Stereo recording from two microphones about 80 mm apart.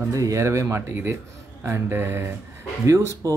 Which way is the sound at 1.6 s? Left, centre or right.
Right.